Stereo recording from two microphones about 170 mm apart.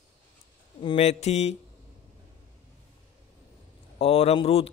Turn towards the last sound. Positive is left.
turn(degrees=35)  # may be behind; listen again after turning